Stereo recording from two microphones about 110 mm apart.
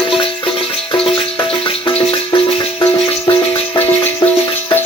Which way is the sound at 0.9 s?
55° left (ahead or behind).